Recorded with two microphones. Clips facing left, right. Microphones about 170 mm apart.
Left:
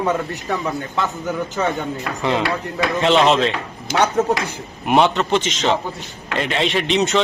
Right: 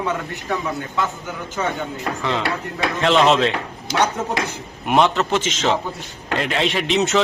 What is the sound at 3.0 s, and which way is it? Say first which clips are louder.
Speech: even; centre (ahead or behind).